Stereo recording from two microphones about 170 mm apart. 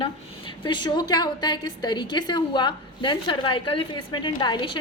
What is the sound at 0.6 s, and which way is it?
A woman's voice, 25° left (ahead or behind).